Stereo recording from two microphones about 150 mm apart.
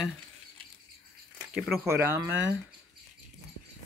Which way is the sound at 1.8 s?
15° right (ahead or behind).